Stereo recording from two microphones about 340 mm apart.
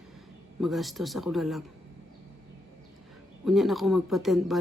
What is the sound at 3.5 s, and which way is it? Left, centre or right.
Speech, centre.